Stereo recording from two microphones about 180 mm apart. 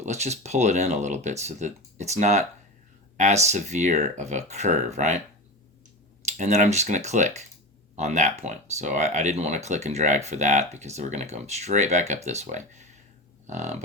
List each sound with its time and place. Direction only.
0.0 s speech: 40° right (ahead or behind)
6.2 s speech: 40° right (ahead or behind)